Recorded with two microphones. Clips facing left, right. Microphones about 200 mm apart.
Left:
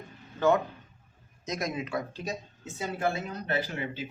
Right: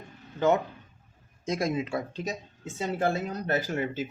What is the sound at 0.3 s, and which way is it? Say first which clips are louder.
Speech: even; 20° right (ahead or behind).